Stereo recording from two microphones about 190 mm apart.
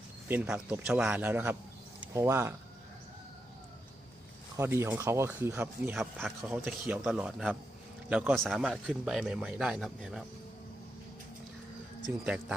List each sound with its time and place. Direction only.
0.3 s speech: 5° right (ahead or behind)
4.5 s a man's voice: 15° right (ahead or behind)
12.2 s a man's voice: 5° right (ahead or behind)